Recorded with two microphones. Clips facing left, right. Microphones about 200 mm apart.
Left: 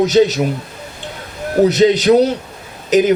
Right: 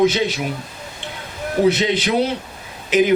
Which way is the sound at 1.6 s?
40° left (ahead or behind).